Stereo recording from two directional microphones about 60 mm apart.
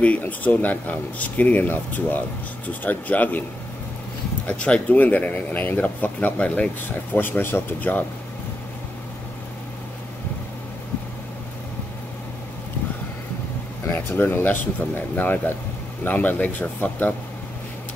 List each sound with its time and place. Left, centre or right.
0.3 s speech: left
4.5 s speech: left
7.2 s speech: left
13.9 s speech: left